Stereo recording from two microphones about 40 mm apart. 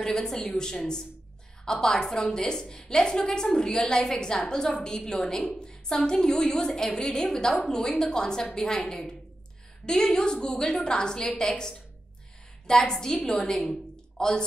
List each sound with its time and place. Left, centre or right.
0.0 s a woman's voice: centre
1.6 s a woman's voice: centre
13.7 s a sound: centre